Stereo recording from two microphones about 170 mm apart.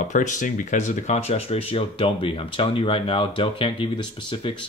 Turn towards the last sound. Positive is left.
turn(degrees=30)  # may be behind; listen again after turning